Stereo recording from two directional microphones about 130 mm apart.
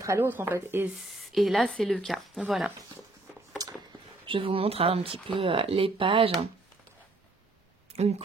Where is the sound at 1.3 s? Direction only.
Centre (ahead or behind).